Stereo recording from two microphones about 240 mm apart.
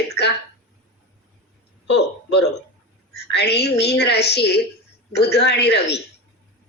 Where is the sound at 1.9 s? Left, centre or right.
Left.